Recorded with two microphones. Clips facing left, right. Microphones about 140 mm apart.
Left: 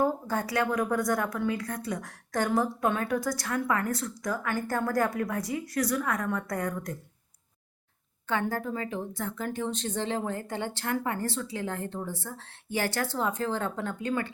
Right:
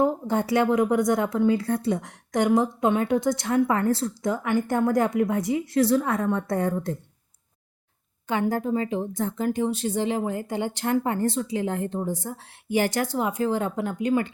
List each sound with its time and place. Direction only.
0.0 s a woman's voice: 25° right (ahead or behind)
8.3 s speech: 15° right (ahead or behind)